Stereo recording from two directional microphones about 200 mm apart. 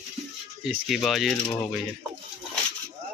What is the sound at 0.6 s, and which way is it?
A man's voice, 5° right (ahead or behind).